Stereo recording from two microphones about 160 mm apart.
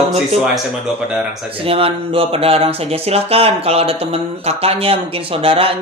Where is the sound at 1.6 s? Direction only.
35° right (ahead or behind).